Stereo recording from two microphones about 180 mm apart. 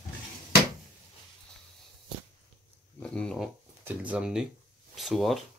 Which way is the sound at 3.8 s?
5° right (ahead or behind).